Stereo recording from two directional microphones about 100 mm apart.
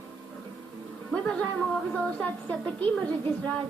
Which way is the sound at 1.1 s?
10° left (ahead or behind).